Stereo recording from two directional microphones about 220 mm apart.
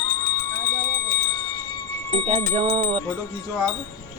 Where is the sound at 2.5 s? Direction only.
25° right (ahead or behind).